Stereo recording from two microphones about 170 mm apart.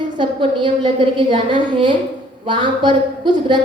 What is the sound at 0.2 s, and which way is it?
A woman's voice, 30° right (ahead or behind).